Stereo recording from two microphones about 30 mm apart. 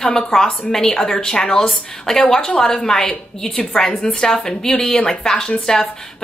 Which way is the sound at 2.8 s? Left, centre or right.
Centre.